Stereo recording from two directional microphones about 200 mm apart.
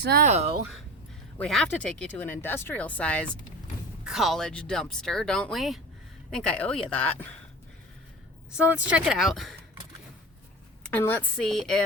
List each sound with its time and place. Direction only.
0.0 s speech: 50° right (ahead or behind)
0.3 s speech: 35° right (ahead or behind)
1.4 s speech: 5° left (ahead or behind)
8.5 s speech: 5° right (ahead or behind)
10.8 s speech: 10° left (ahead or behind)